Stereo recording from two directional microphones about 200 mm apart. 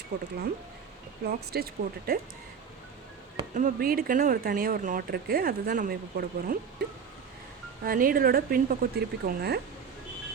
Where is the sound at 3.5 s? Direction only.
45° right (ahead or behind).